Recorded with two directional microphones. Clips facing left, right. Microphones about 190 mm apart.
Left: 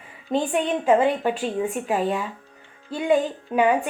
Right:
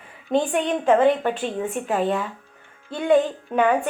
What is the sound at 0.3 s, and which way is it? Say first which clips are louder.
A woman's voice: right 1 dB; 5° left (ahead or behind).